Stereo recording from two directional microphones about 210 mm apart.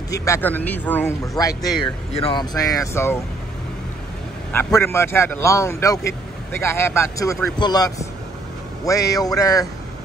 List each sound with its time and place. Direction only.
0.1 s a man's voice: 15° left (ahead or behind)
4.5 s a man's voice: 10° left (ahead or behind)